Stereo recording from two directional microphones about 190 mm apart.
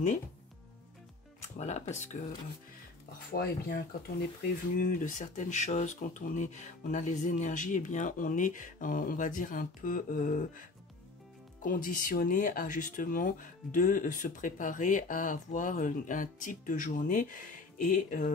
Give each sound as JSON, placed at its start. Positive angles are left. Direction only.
{"t": 1.6, "sound": "speech", "side_deg": 35}
{"t": 3.3, "sound": "speech", "side_deg": 55}
{"t": 4.7, "sound": "speech", "side_deg": 45}
{"t": 11.6, "sound": "speech", "side_deg": 45}